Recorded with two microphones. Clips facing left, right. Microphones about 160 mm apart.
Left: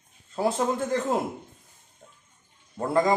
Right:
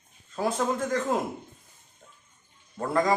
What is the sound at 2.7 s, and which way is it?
Speech, 20° left (ahead or behind).